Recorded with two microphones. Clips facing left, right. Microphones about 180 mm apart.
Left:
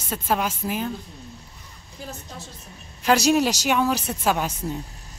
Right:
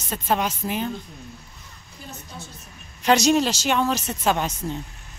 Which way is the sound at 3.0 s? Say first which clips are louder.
Even; 5° left (ahead or behind).